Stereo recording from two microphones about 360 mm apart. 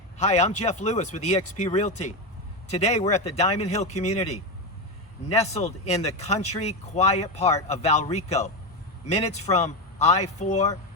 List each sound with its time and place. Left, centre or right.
0.2 s speech: centre